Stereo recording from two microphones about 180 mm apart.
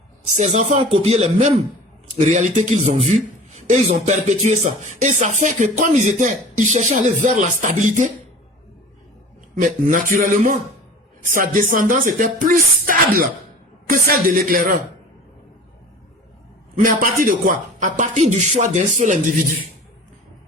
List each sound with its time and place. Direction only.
0.3 s speech: 40° right (ahead or behind)
9.6 s speech: 50° right (ahead or behind)
16.7 s speech: 50° right (ahead or behind)